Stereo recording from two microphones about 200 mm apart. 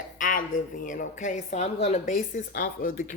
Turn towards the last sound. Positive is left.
turn(degrees=45)  # may be behind; listen again after turning